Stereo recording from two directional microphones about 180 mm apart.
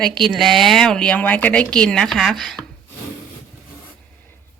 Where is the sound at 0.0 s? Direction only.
Centre (ahead or behind).